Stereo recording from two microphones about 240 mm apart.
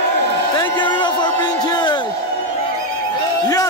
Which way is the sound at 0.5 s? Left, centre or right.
Centre.